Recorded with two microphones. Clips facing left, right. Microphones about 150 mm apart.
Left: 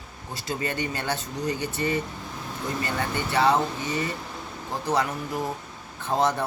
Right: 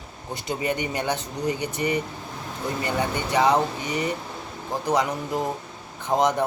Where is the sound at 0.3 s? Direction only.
20° right (ahead or behind).